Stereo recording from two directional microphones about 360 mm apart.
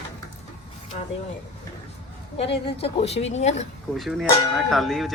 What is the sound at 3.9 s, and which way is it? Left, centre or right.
Speech, centre.